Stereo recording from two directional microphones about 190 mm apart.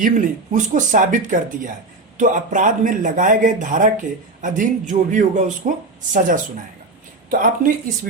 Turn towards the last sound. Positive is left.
turn(degrees=-45)  # may be behind; listen again after turning